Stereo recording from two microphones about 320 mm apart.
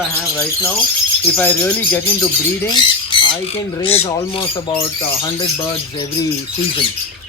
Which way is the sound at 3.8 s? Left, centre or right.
Centre.